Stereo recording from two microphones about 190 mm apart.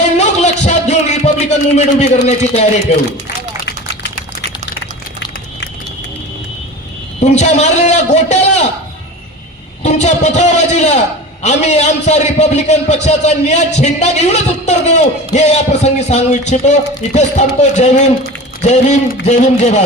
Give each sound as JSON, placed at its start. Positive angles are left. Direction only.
{"t": 0.2, "sound": "a sound", "side_deg": 35}
{"t": 0.6, "sound": "music", "side_deg": 35}
{"t": 2.2, "sound": "a man's voice", "side_deg": 35}
{"t": 7.2, "sound": "a man's voice", "side_deg": 35}
{"t": 9.8, "sound": "a man's voice", "side_deg": 35}